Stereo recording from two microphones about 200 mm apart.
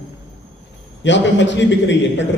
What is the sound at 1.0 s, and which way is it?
A man's voice, 65° left (ahead or behind).